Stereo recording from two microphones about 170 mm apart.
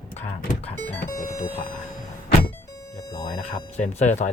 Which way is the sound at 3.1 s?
30° left (ahead or behind).